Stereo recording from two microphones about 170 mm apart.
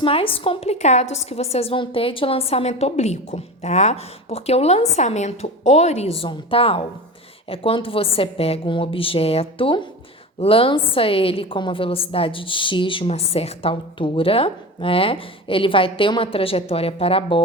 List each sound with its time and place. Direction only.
0.0 s a woman's voice: 35° left (ahead or behind)